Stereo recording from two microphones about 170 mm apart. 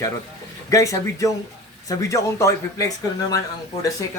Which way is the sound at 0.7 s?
20° left (ahead or behind).